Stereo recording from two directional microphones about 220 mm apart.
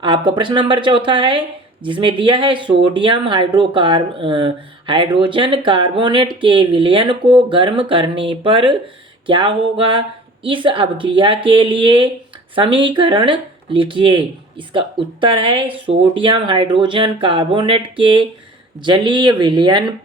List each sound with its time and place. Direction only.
0.0 s speech: 20° right (ahead or behind)